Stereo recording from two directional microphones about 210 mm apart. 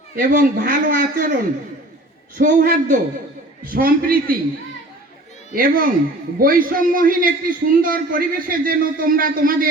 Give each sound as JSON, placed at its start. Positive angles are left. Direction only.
{"t": 0.2, "sound": "a man's voice", "side_deg": -45}
{"t": 2.4, "sound": "a man's voice", "side_deg": -40}
{"t": 5.5, "sound": "a man's voice", "side_deg": -40}